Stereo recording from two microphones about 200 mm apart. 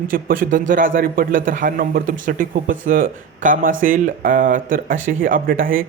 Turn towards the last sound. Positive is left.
turn(degrees=-45)  # may be behind; listen again after turning